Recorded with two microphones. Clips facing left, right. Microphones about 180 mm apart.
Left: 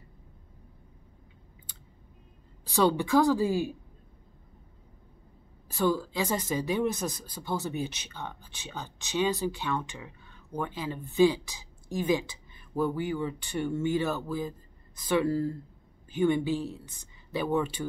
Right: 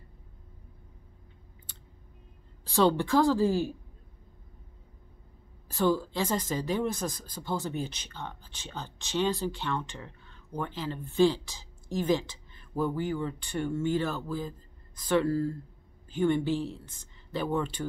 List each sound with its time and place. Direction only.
2.8 s speech: 10° left (ahead or behind)
5.9 s speech: 10° left (ahead or behind)